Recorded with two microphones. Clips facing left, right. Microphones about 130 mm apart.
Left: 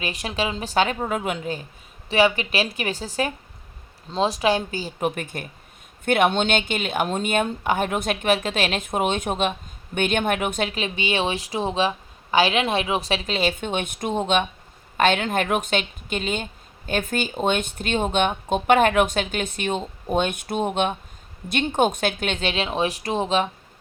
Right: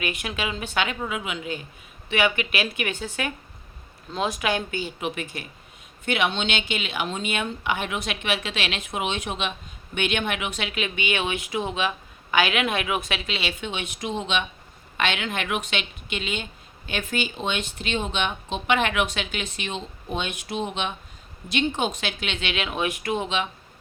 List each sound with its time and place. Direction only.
0.0 s a woman's voice: 35° left (ahead or behind)